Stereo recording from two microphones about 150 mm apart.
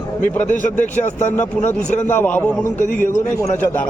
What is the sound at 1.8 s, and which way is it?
Speech, 10° left (ahead or behind).